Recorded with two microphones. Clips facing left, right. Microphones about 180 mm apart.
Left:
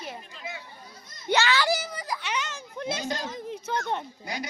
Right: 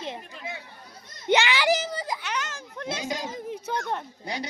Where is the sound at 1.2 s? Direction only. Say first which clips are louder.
Right 2 dB; 15° right (ahead or behind).